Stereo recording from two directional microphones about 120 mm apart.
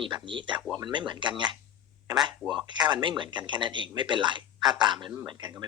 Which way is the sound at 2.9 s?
40° right (ahead or behind).